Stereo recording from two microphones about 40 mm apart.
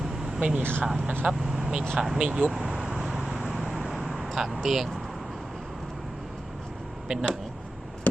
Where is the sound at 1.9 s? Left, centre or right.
Centre.